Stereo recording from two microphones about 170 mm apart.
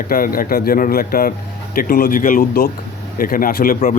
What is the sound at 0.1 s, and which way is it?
Speech, 60° left (ahead or behind).